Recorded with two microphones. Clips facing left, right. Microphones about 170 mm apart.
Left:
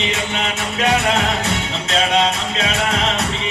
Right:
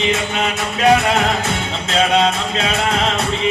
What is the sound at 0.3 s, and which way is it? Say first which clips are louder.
Music: right 2 dB; 35° right (ahead or behind).